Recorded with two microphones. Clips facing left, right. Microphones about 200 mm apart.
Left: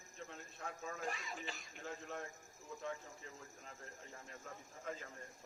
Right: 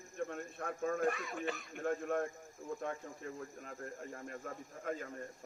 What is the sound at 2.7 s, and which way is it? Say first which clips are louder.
Speech: right 6 dB; 55° right (ahead or behind).